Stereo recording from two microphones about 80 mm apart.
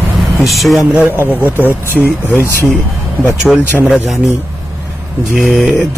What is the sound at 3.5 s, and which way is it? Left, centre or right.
Speech, centre.